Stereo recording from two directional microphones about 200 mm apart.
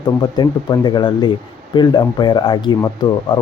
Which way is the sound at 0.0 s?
20° left (ahead or behind).